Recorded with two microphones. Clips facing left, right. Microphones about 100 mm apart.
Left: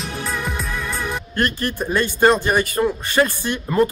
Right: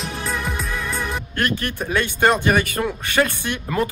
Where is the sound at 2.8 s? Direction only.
10° left (ahead or behind).